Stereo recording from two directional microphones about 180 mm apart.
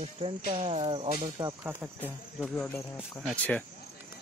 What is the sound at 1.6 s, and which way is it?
Speech, 10° right (ahead or behind).